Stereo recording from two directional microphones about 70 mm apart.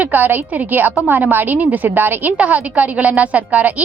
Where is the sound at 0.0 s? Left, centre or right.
Right.